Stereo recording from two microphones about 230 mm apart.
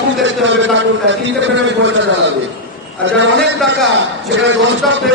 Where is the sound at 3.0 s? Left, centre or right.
Right.